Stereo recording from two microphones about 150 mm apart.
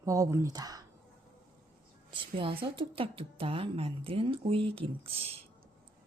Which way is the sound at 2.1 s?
35° right (ahead or behind).